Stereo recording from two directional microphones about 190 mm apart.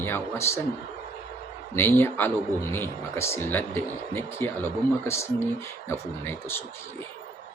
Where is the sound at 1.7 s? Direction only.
10° left (ahead or behind).